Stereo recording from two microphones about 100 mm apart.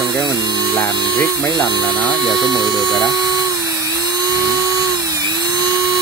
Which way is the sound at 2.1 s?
Centre (ahead or behind).